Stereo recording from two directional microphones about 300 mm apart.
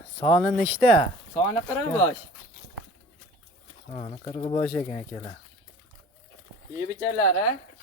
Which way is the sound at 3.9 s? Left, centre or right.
Left.